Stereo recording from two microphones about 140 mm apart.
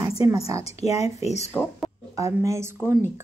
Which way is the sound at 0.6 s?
50° left (ahead or behind).